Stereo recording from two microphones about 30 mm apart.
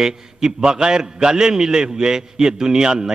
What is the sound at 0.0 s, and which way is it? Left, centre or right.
A man's voice, right.